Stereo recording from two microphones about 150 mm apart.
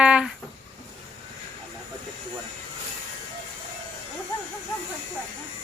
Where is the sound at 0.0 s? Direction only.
5° right (ahead or behind).